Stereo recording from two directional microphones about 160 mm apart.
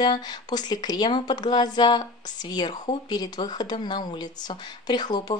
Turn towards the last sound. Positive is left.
turn(degrees=25)  # may be behind; listen again after turning